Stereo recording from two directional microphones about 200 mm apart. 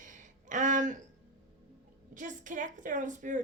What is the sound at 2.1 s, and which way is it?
Speech, 40° right (ahead or behind).